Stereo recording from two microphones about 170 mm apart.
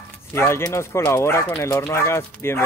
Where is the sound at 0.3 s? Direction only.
15° left (ahead or behind).